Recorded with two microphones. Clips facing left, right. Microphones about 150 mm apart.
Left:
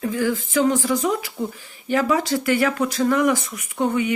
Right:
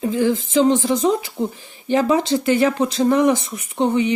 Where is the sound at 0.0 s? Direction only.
25° right (ahead or behind).